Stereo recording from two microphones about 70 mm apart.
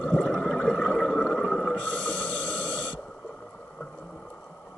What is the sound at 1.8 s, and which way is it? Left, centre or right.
Snort, left.